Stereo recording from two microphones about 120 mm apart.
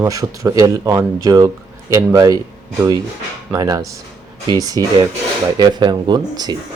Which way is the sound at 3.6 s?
30° right (ahead or behind).